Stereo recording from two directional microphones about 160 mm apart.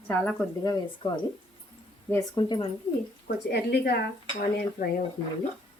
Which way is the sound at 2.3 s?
30° left (ahead or behind).